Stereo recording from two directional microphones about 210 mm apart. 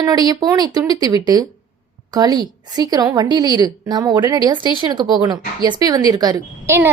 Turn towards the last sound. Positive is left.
turn(degrees=-10)  # may be behind; listen again after turning